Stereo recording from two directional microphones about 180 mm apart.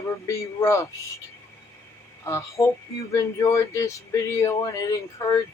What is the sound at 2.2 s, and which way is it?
Speech, 15° left (ahead or behind).